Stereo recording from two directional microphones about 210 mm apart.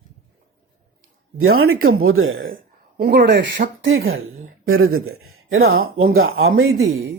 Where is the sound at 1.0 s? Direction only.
80° right.